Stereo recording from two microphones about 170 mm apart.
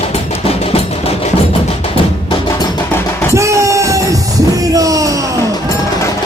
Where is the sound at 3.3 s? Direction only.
15° right (ahead or behind).